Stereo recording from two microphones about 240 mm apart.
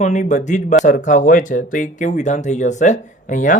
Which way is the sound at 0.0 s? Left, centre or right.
Left.